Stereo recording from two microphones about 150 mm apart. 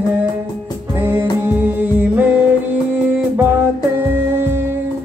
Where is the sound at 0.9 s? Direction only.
15° right (ahead or behind).